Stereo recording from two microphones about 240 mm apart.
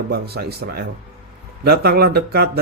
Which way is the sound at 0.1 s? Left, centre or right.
Right.